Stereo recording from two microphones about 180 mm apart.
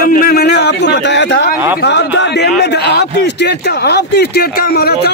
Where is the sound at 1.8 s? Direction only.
75° left (ahead or behind).